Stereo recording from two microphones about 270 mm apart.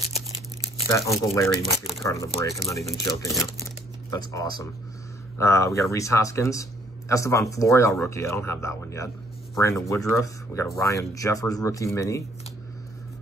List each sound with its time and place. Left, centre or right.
0.1 s crumpling: left
1.3 s a man's voice: centre